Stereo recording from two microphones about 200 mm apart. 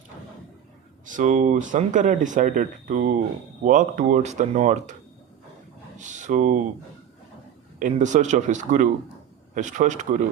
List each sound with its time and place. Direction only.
1.0 s speech: 40° right (ahead or behind)
6.0 s speech: 40° right (ahead or behind)
7.8 s speech: 40° right (ahead or behind)